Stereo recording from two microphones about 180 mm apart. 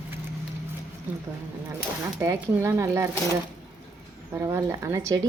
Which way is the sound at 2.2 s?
15° right (ahead or behind).